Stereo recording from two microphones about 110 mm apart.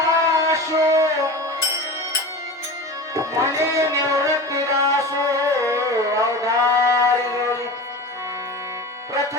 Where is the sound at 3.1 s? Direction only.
30° right (ahead or behind).